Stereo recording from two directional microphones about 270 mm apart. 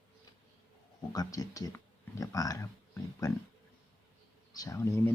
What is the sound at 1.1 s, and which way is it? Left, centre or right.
Speech, centre.